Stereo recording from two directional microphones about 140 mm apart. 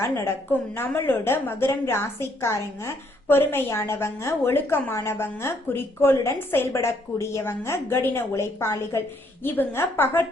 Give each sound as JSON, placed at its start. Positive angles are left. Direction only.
{"t": 0.0, "sound": "a woman's voice", "side_deg": 15}